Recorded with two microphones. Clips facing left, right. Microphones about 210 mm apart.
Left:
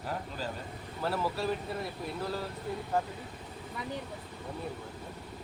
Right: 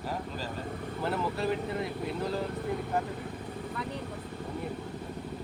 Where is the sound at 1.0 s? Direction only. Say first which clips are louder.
Even; 20° right (ahead or behind).